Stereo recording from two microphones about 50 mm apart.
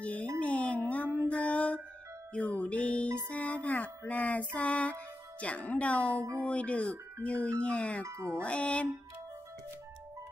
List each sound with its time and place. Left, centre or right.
0.0 s music: left
5.4 s speech: left
8.0 s speech: right
8.4 s speech: left